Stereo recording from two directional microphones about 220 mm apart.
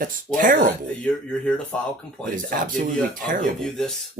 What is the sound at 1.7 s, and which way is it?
Speech, 5° left (ahead or behind).